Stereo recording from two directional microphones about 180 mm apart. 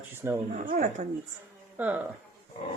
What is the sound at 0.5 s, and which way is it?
Speech, 45° right (ahead or behind).